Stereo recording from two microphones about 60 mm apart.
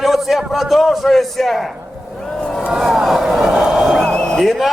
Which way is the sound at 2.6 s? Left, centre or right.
Centre.